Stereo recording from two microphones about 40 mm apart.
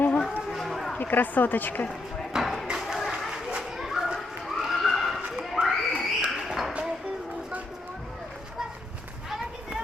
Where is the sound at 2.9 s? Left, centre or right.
Centre.